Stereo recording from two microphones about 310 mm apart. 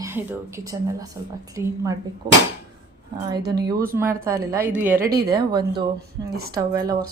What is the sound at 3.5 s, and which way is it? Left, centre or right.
Speech, centre.